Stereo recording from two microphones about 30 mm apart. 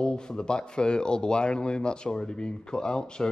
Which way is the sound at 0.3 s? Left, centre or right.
Left.